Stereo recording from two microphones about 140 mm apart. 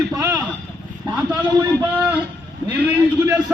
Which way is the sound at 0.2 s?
25° right (ahead or behind).